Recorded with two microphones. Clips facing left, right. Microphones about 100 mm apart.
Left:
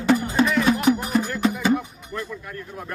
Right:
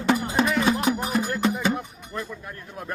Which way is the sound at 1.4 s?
Centre (ahead or behind).